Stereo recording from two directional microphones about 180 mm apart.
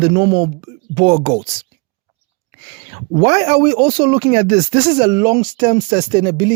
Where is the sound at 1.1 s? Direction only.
35° right (ahead or behind).